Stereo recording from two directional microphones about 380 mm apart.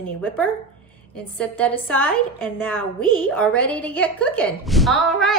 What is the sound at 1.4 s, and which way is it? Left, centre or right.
A woman's voice, centre.